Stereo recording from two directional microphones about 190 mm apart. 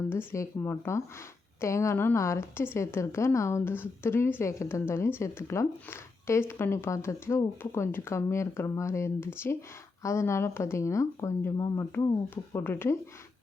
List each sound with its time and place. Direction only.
0.1 s a woman's voice: 10° left (ahead or behind)